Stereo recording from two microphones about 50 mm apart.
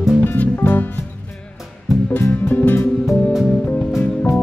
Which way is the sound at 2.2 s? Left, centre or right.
Left.